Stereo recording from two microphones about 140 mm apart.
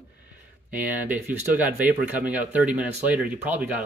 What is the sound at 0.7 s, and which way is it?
Speech, 10° right (ahead or behind).